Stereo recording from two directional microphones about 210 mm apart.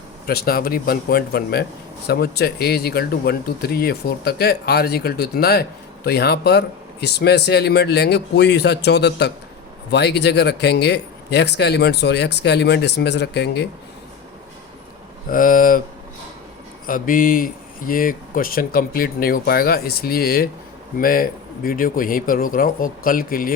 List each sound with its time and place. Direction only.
0.3 s speech: 45° left (ahead or behind)
15.3 s speech: 40° left (ahead or behind)
16.8 s speech: 40° left (ahead or behind)